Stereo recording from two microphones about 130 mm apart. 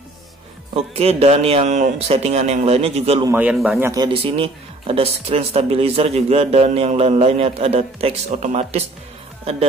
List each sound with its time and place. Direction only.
0.7 s speech: 55° right (ahead or behind)
3.3 s a man's voice: 10° right (ahead or behind)
4.1 s speech: 45° right (ahead or behind)